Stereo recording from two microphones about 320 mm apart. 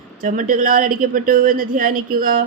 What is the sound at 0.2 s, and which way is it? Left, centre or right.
Speech, right.